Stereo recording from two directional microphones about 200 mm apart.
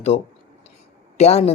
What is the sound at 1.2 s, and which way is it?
Speech, 30° left (ahead or behind).